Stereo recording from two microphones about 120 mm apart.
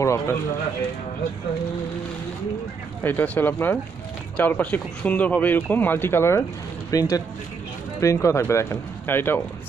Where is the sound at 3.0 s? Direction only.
15° left (ahead or behind).